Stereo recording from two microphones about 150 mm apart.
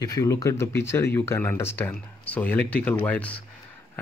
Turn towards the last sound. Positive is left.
turn(degrees=10)  # may be behind; listen again after turning